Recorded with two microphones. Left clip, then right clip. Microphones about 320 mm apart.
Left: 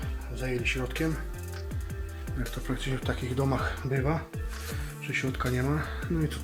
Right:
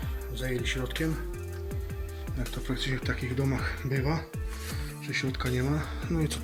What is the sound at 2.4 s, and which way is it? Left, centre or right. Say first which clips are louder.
Speech: right 1 dB; centre.